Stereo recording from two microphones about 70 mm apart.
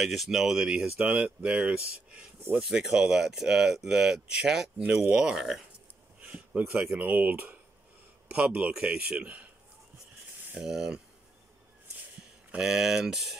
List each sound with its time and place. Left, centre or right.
0.0 s speech: centre
5.4 s speech: centre
6.2 s a sound: centre
7.0 s speech: right
10.5 s speech: centre
12.4 s speech: centre